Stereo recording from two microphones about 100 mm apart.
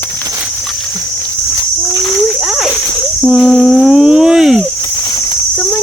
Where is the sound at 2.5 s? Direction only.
5° right (ahead or behind).